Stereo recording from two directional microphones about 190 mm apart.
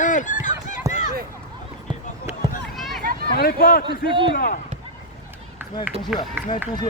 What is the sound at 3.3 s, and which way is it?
Speech, 50° left (ahead or behind).